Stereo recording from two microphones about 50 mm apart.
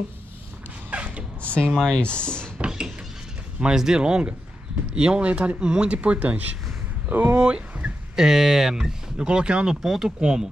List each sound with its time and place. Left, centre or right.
0.8 s a sound: right
1.6 s speech: centre
3.7 s speech: centre; by 6.4 s right
7.1 s speech: right
7.3 s speech: right
8.2 s speech: centre
9.8 s speech: centre